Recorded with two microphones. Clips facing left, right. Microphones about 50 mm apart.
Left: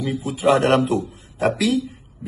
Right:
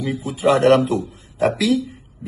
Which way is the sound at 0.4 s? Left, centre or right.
Left.